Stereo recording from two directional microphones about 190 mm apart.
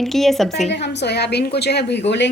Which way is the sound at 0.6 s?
65° left (ahead or behind).